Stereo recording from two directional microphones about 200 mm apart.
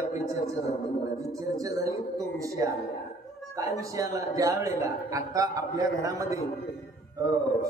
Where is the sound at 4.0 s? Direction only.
15° right (ahead or behind).